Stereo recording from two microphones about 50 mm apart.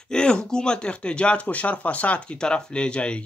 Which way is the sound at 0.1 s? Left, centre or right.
Centre.